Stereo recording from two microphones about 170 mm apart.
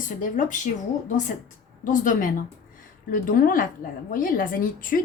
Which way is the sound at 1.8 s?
50° left (ahead or behind).